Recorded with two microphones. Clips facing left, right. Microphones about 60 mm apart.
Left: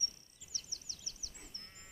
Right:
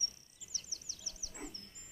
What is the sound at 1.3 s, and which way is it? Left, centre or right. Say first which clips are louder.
Goat: right 10 dB; right.